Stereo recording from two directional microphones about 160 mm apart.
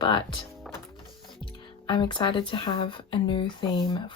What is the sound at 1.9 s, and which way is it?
Speech, 30° left (ahead or behind).